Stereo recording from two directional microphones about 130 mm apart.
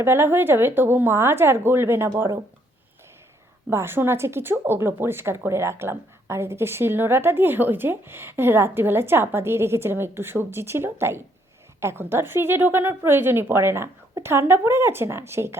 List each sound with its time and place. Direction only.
0.0 s a woman's voice: 20° right (ahead or behind)
3.7 s a woman's voice: 20° right (ahead or behind)